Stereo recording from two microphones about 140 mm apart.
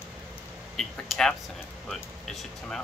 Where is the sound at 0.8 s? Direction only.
5° left (ahead or behind).